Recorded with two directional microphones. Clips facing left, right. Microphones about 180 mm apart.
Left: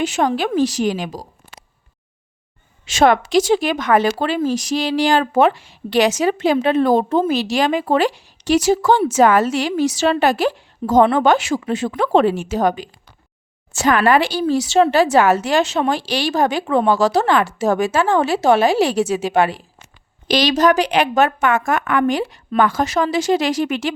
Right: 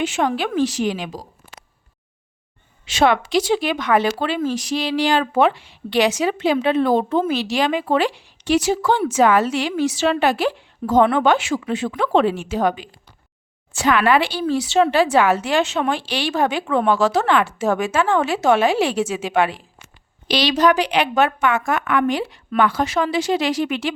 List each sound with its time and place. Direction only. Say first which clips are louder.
0.0 s a woman's voice: left 2 dB; 40° left (ahead or behind)
2.8 s a woman's voice: left 3 dB; 45° left (ahead or behind)